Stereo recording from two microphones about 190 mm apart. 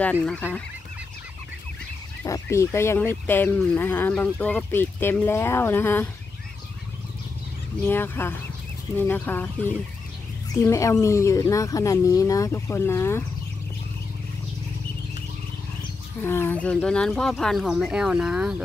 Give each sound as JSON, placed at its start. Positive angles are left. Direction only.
{"t": 0.0, "sound": "speech", "side_deg": 5}
{"t": 2.2, "sound": "speech", "side_deg": 15}
{"t": 7.8, "sound": "speech", "side_deg": 10}
{"t": 16.2, "sound": "speech", "side_deg": 10}